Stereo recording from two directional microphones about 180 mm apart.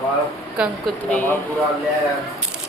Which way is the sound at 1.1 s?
10° left (ahead or behind).